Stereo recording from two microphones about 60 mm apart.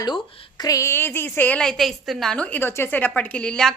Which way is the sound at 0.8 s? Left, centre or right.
Left.